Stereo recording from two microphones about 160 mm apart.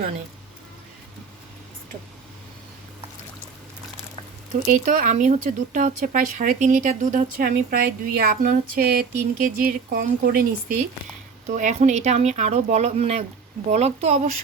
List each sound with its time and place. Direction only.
4.6 s speech: 55° right (ahead or behind)
11.4 s speech: 50° right (ahead or behind)